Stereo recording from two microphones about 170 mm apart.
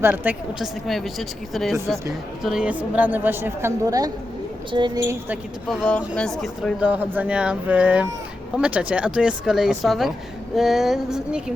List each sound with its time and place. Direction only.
0.0 s speech: 10° right (ahead or behind)
0.9 s speech: centre (ahead or behind); by 5.4 s 15° right (ahead or behind)
5.6 s speech: 5° left (ahead or behind)